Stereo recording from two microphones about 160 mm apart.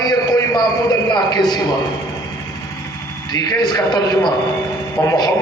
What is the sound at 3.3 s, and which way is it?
A man's voice, 25° left (ahead or behind).